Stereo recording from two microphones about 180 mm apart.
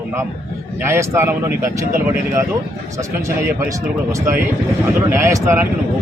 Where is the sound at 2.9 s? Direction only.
15° right (ahead or behind).